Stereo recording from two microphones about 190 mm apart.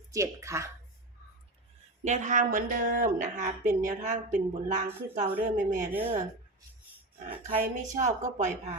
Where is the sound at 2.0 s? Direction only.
40° right (ahead or behind).